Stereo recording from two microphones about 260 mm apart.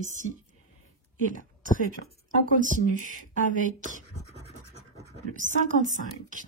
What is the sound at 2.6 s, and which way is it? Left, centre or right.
Speech, right.